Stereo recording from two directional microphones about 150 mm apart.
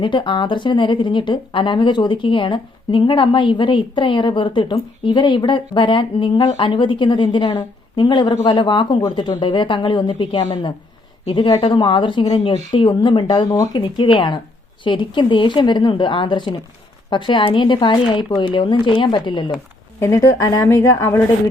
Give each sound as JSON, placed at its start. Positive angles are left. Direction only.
{"t": 0.0, "sound": "speech", "side_deg": 30}
{"t": 20.0, "sound": "a woman's voice", "side_deg": 20}